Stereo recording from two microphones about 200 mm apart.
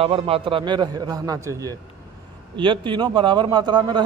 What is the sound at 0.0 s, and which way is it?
A man's voice, 30° right (ahead or behind).